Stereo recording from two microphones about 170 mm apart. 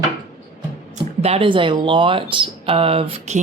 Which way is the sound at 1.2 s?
35° right (ahead or behind).